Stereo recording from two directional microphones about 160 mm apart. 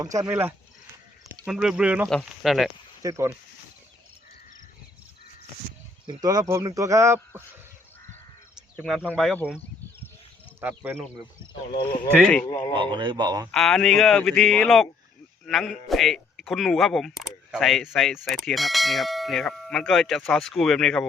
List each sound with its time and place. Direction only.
0.0 s a man's voice: 20° right (ahead or behind); by 2.7 s centre (ahead or behind)
3.0 s speech: 20° right (ahead or behind)
6.2 s speech: 20° right (ahead or behind)
8.8 s a man's voice: 5° right (ahead or behind)
9.0 s speech: 5° left (ahead or behind)
10.6 s speech: 10° right (ahead or behind)
12.2 s speech: 5° left (ahead or behind)
12.5 s a man's voice: 30° left (ahead or behind)
12.7 s speech: 30° right (ahead or behind)
13.5 s a man's voice: 5° left (ahead or behind)